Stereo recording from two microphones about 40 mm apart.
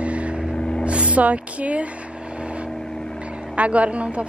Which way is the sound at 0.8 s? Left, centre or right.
Right.